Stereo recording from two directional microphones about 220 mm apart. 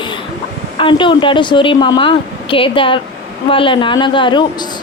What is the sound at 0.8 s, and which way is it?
Speech, 20° left (ahead or behind).